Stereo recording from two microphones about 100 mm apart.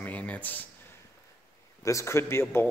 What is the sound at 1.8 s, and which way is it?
Speech, 30° left (ahead or behind).